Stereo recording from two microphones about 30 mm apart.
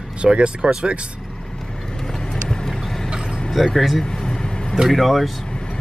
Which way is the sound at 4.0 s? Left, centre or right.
Left.